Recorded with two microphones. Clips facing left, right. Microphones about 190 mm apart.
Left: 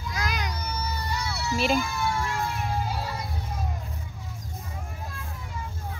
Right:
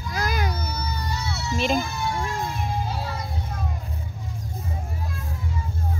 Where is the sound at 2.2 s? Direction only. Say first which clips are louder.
Right 1 dB; 15° right (ahead or behind).